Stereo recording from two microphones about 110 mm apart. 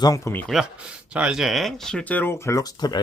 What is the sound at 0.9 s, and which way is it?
Speech, 10° right (ahead or behind).